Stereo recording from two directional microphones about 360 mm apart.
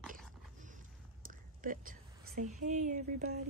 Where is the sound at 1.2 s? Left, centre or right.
Right.